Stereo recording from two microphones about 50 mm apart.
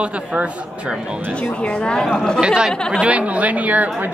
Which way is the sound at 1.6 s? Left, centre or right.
Centre.